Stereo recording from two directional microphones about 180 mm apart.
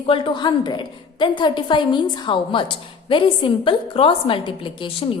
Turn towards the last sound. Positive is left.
turn(degrees=30)  # may be behind; listen again after turning